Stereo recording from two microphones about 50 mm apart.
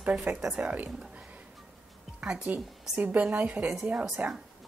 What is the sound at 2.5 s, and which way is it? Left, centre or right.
A woman's voice, right.